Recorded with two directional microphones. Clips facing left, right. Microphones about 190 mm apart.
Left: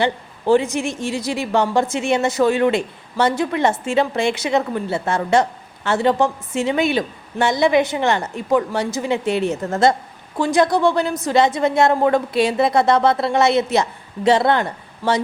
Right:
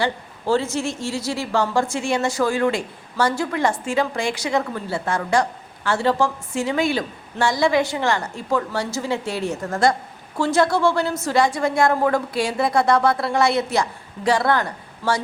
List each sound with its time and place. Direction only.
0.0 s a woman's voice: 15° left (ahead or behind)